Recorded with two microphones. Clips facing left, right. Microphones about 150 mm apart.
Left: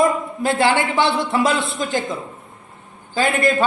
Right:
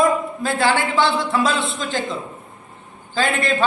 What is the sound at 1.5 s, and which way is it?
Speech, 25° right (ahead or behind).